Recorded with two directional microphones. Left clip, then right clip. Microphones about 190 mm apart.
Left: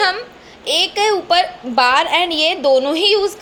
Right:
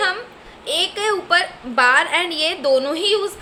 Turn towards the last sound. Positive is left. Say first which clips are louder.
# left 5 dB
turn(degrees=25)  # may be behind; listen again after turning